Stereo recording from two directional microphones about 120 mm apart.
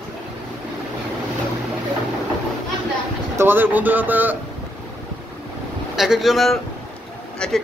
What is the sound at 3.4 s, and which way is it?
Speech, 15° right (ahead or behind).